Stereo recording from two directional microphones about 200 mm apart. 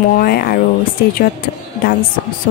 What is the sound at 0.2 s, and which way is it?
Speech, 50° left (ahead or behind).